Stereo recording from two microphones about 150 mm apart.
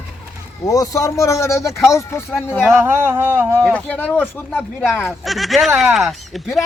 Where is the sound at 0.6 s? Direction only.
25° left (ahead or behind).